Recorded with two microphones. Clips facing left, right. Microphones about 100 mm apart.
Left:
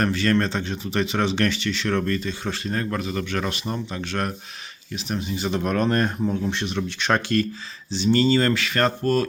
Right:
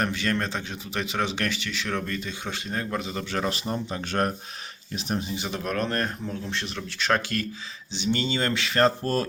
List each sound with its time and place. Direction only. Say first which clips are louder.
0.0 s speech: left 5 dB; 15° right (ahead or behind)
4.1 s speech: right 3 dB; 35° right (ahead or behind)
5.5 s speech: left 7 dB; 5° left (ahead or behind)
8.0 s speech: left 7 dB; 15° right (ahead or behind)